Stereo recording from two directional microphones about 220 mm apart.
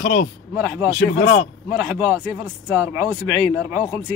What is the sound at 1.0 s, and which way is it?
Speech, 45° left (ahead or behind).